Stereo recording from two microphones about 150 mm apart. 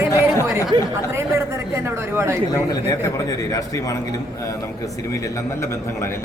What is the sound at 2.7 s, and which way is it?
A man's voice, 20° left (ahead or behind).